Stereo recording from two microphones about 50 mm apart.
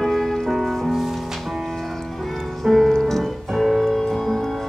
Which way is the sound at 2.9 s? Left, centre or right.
Centre.